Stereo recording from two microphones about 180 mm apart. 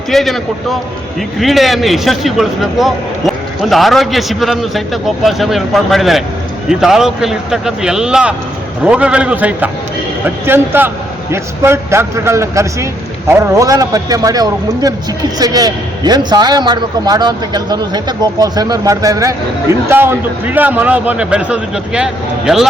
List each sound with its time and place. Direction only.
0.1 s a man's voice: centre (ahead or behind)